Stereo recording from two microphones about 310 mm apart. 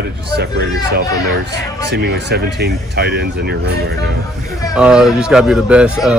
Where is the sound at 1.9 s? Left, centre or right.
Right.